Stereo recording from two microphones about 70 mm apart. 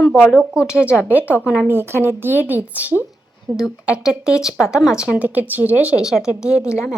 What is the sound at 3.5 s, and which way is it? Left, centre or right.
Speech, centre.